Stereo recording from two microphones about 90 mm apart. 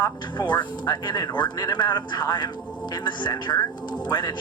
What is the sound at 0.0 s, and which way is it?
Speech, 55° left (ahead or behind).